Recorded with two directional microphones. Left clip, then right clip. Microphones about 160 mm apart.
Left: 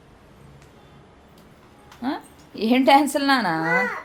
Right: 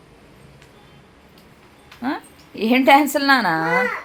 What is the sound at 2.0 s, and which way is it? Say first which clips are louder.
A woman's voice: right 3 dB; 10° right (ahead or behind).